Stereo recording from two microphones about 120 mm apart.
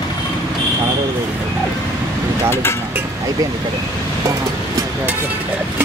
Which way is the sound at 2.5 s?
20° left (ahead or behind).